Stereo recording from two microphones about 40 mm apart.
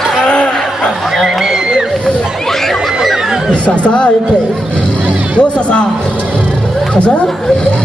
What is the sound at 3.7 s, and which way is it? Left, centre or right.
Speech, left.